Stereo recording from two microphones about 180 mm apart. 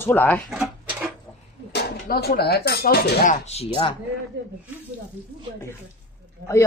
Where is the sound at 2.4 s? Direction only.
60° left (ahead or behind).